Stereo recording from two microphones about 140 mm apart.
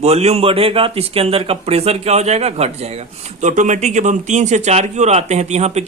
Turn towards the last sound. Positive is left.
turn(degrees=-50)  # may be behind; listen again after turning